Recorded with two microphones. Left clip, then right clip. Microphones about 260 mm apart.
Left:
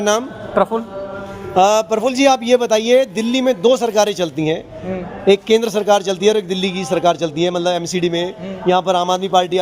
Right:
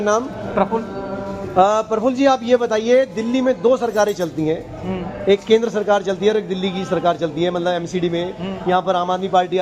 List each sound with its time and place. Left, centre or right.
0.0 s a woman's voice: left